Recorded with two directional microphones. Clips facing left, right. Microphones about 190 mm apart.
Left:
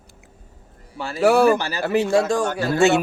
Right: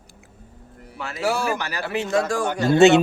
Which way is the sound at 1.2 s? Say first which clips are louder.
Left 9 dB; 60° left (ahead or behind).